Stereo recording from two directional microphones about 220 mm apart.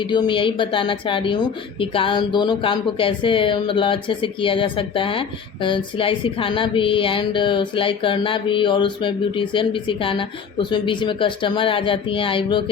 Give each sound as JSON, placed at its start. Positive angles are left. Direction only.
{"t": 0.0, "sound": "speech", "side_deg": 20}